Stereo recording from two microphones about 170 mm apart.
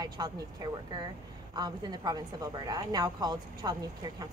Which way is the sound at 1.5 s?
25° right (ahead or behind).